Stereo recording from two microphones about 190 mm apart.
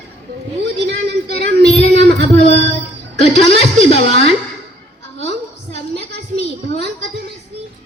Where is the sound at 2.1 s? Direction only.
35° left (ahead or behind).